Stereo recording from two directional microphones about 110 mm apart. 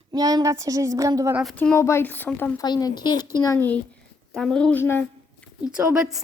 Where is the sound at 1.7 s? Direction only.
25° left (ahead or behind).